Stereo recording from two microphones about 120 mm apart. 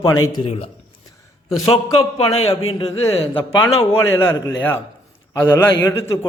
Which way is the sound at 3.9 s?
20° left (ahead or behind).